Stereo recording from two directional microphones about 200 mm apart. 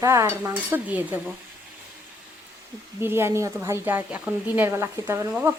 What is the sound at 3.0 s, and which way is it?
Speech, 10° right (ahead or behind).